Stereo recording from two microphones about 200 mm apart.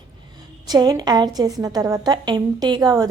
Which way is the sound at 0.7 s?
20° right (ahead or behind).